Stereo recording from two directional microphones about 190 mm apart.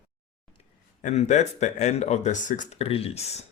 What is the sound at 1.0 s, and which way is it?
Speech, 40° left (ahead or behind).